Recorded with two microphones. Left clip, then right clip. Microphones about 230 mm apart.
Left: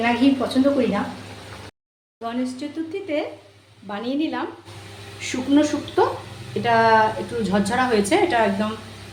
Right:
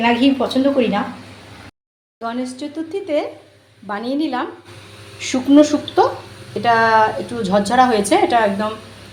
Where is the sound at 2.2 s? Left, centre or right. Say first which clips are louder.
Right 3 dB; centre.